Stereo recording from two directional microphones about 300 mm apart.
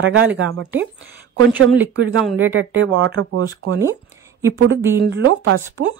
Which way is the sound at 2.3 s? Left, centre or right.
Right.